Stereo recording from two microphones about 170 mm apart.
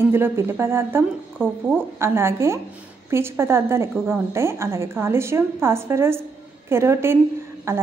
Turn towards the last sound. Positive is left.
turn(degrees=-15)  # may be behind; listen again after turning